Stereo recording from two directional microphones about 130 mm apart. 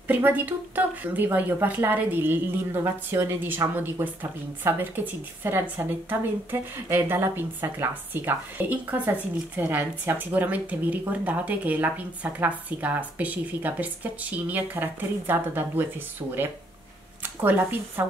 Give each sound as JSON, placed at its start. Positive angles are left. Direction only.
{"t": 0.1, "sound": "speech", "side_deg": -15}
{"t": 17.2, "sound": "speech", "side_deg": -15}